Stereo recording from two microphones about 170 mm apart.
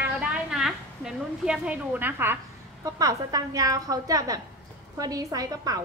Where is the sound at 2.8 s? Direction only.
20° right (ahead or behind).